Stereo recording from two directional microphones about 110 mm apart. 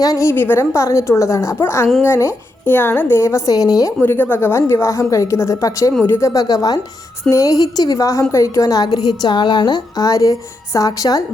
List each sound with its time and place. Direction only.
0.0 s speech: 30° left (ahead or behind)
4.0 s a woman's voice: 20° left (ahead or behind)